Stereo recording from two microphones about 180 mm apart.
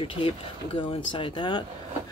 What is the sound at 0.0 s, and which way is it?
Speech, 30° left (ahead or behind).